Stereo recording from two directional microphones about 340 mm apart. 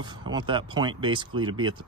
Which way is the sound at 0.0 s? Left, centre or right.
Centre.